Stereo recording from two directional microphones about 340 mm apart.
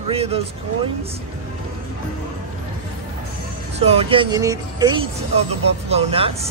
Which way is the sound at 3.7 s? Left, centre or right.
Centre.